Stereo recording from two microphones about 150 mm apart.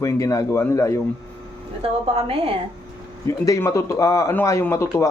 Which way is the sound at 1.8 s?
40° right (ahead or behind).